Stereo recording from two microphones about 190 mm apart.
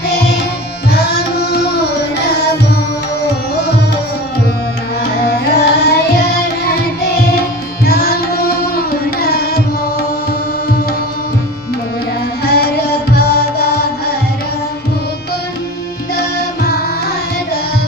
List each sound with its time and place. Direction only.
0.9 s tabla: 60° left (ahead or behind)
2.1 s music: 60° left (ahead or behind)
5.0 s carnatic music: 55° left (ahead or behind)
7.9 s tabla: 55° left (ahead or behind)
12.5 s music: 55° left (ahead or behind)